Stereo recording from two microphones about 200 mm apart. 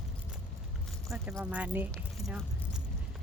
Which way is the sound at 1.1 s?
10° right (ahead or behind).